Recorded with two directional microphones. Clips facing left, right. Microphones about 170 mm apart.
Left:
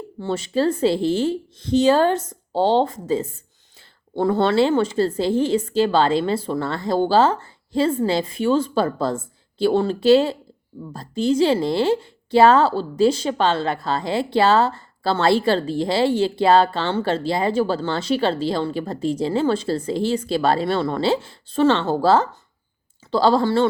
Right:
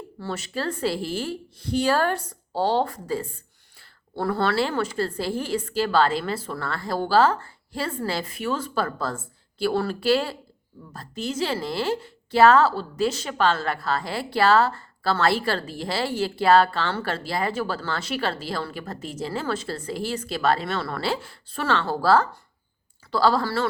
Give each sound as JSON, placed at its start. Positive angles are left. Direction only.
{"t": 0.2, "sound": "a woman's voice", "side_deg": 25}